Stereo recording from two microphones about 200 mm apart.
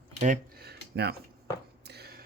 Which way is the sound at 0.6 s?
55° right (ahead or behind).